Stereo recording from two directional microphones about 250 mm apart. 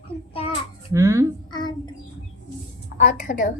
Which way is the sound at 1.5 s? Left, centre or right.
Centre.